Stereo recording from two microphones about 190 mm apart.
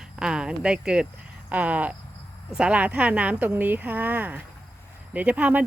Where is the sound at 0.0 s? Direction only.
5° right (ahead or behind).